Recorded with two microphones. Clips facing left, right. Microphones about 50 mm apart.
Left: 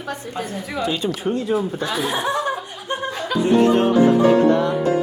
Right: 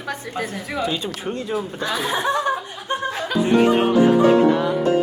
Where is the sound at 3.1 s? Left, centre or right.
Centre.